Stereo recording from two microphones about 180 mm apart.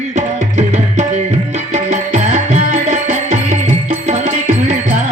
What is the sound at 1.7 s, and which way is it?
Music, 45° right (ahead or behind).